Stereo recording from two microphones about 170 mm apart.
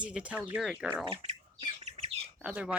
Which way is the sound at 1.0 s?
35° right (ahead or behind).